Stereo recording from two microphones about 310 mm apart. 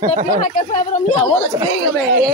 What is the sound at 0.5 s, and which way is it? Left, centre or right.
Speech, left.